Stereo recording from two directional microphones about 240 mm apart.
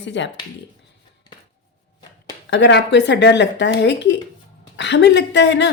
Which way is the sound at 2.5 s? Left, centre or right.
Left.